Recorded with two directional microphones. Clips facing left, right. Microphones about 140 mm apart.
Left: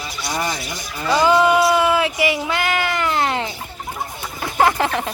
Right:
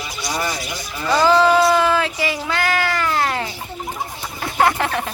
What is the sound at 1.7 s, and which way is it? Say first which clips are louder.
Speech: even; 20° left (ahead or behind).